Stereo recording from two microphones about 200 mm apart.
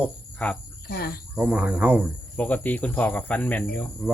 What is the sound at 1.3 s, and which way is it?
Speech, 5° right (ahead or behind).